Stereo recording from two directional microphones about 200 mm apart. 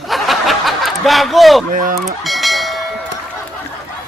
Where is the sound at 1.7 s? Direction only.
45° right (ahead or behind).